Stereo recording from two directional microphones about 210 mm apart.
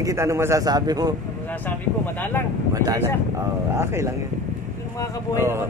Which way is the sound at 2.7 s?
15° right (ahead or behind).